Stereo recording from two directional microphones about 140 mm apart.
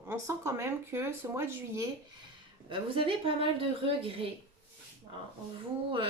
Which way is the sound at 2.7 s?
40° right (ahead or behind).